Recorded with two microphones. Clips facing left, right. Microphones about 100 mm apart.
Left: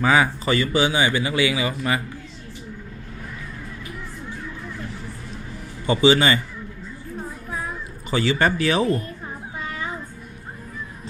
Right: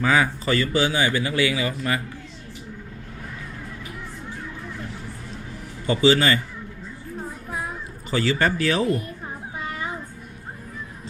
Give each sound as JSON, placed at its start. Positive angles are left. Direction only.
{"t": 0.0, "sound": "speech", "side_deg": 15}
{"t": 5.8, "sound": "a man's voice", "side_deg": 20}
{"t": 8.1, "sound": "speech", "side_deg": 15}
{"t": 9.2, "sound": "a sound", "side_deg": -15}